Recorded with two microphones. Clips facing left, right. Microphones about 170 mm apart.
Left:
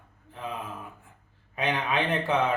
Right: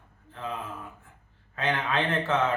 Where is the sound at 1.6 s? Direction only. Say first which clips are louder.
Even; 15° left (ahead or behind).